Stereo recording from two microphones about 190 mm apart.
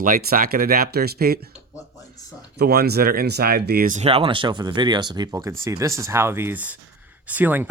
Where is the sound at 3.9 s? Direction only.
30° right (ahead or behind).